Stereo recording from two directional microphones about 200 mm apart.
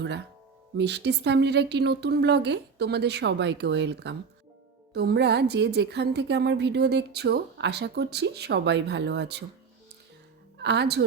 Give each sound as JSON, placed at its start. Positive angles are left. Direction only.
{"t": 0.8, "sound": "a woman's voice", "side_deg": -60}
{"t": 10.6, "sound": "a woman's voice", "side_deg": -55}